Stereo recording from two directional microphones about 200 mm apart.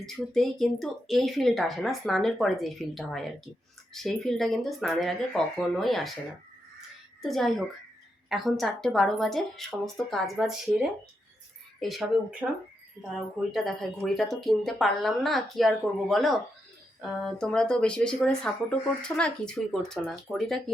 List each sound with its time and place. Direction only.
0.0 s speech: centre (ahead or behind)
7.2 s speech: centre (ahead or behind)
13.5 s speech: centre (ahead or behind)